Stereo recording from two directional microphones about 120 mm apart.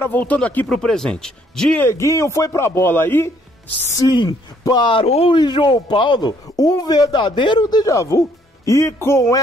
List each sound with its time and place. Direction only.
0.0 s speech: 15° left (ahead or behind)
1.8 s speech: 25° left (ahead or behind)
4.0 s speech: 35° left (ahead or behind)
5.0 s speech: 60° left (ahead or behind)
5.3 s speech: 40° left (ahead or behind); by 9.4 s 25° left (ahead or behind)